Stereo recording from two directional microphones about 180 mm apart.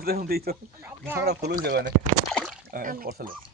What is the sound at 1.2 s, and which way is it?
Speech, 55° right (ahead or behind).